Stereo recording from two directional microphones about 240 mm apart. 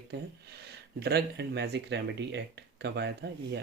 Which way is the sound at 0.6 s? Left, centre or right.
Right.